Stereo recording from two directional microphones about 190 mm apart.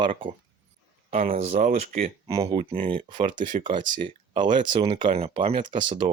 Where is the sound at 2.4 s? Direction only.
30° right (ahead or behind).